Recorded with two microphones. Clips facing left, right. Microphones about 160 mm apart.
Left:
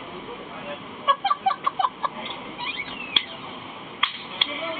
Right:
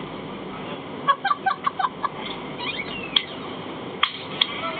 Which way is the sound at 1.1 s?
15° left (ahead or behind).